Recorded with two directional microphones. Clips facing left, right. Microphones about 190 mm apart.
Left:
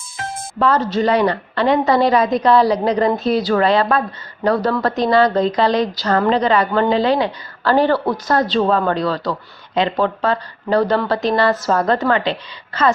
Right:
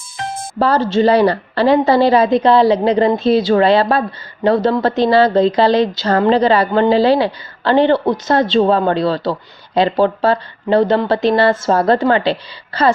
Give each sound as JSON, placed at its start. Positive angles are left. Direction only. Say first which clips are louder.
{"t": 0.6, "sound": "speech", "louder": "right 3 dB", "side_deg": -30}